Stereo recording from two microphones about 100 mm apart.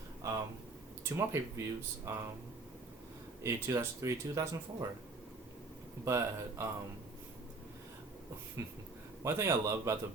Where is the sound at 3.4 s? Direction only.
30° right (ahead or behind).